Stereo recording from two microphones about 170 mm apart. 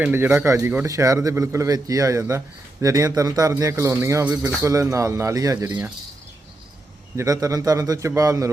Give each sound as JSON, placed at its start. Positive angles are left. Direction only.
{"t": 0.0, "sound": "a man's voice", "side_deg": -15}
{"t": 7.2, "sound": "speech", "side_deg": -20}